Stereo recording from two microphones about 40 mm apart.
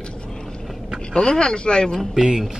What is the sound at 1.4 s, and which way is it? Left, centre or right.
Speech, left.